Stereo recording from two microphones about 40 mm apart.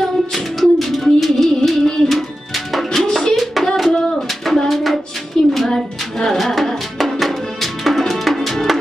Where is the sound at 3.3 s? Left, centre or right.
Centre.